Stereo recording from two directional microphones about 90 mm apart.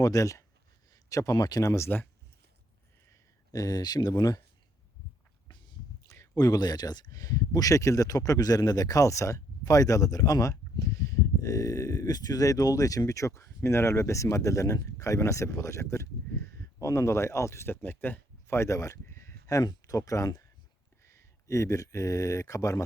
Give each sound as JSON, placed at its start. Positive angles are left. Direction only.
{"t": 0.0, "sound": "speech", "side_deg": 40}
{"t": 3.1, "sound": "speech", "side_deg": 40}
{"t": 5.5, "sound": "a sound", "side_deg": 60}
{"t": 6.1, "sound": "speech", "side_deg": 40}